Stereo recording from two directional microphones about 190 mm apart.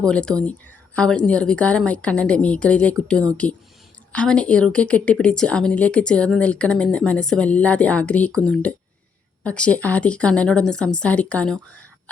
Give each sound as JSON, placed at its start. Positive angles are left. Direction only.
{"t": 0.0, "sound": "speech", "side_deg": 5}